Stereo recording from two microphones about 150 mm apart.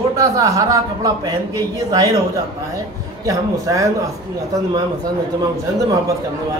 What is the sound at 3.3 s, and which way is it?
Speech, 20° right (ahead or behind).